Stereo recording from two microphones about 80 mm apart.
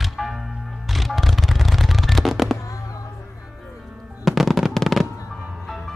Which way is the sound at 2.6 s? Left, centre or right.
Left.